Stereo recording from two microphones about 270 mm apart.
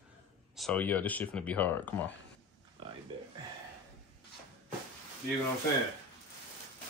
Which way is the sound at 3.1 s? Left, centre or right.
Centre.